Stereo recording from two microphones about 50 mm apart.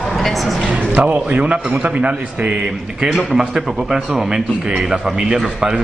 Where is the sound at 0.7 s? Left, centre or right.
Right.